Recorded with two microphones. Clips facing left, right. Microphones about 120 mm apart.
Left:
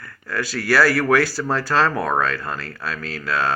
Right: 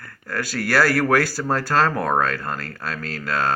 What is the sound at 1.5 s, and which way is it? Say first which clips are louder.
Speech: right 2 dB; 45° right (ahead or behind).